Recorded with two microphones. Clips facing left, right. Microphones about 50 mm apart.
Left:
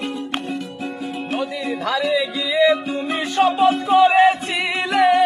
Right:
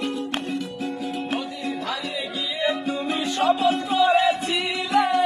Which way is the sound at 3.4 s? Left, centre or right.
Left.